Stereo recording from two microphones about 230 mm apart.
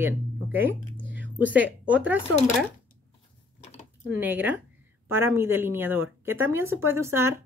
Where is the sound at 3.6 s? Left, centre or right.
Left.